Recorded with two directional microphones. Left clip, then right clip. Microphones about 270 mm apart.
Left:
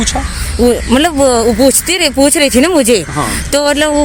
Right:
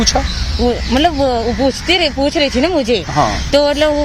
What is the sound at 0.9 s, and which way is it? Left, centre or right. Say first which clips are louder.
Speech: left 4 dB; left.